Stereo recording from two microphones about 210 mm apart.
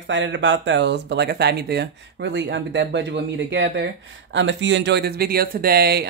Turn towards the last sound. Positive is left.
turn(degrees=-50)  # may be behind; listen again after turning